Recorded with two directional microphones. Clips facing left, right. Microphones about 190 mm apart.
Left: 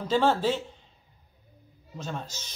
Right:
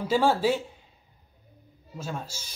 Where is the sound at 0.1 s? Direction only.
10° right (ahead or behind).